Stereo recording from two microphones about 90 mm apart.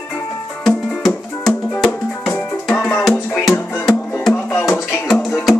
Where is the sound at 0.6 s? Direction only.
5° left (ahead or behind).